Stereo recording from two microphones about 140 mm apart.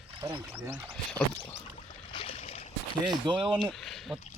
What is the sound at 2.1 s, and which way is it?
Boat, 40° left (ahead or behind).